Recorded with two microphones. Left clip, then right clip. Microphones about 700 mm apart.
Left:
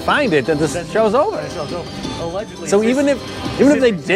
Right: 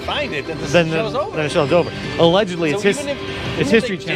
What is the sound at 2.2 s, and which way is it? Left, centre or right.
Speech, right.